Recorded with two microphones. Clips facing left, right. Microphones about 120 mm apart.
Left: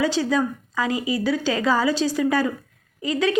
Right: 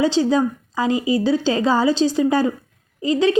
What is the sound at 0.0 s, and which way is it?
A woman's voice, 25° right (ahead or behind).